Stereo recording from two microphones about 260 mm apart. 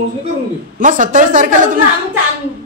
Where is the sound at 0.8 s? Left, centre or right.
Right.